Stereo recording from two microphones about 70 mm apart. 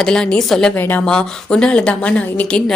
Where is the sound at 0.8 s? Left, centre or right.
Left.